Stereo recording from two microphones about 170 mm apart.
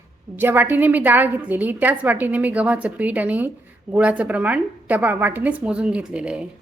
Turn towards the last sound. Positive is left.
turn(degrees=-5)  # may be behind; listen again after turning